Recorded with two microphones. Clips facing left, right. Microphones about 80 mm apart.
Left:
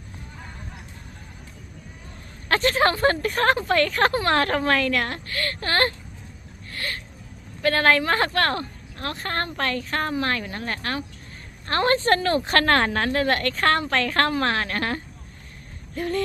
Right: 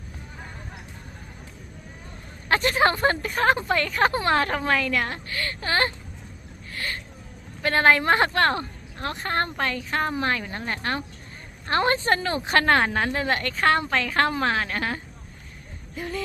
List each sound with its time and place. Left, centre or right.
2.5 s a woman's voice: centre
3.2 s a woman's voice: centre
4.1 s a woman's voice: centre
7.6 s a woman's voice: right
16.0 s a sound: centre